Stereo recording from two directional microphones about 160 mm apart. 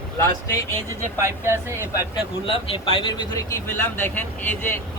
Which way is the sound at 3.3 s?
15° left (ahead or behind).